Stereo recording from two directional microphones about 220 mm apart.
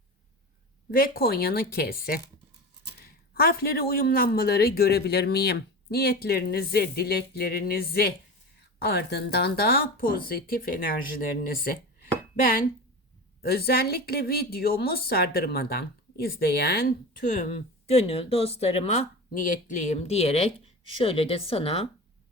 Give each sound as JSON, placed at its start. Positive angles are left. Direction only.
{"t": 0.9, "sound": "a woman's voice", "side_deg": 40}
{"t": 13.4, "sound": "a woman's voice", "side_deg": 45}